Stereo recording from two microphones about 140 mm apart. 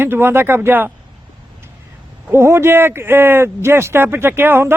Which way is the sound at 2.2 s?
20° right (ahead or behind).